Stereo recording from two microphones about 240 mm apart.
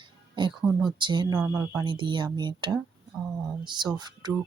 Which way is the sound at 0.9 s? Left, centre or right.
Centre.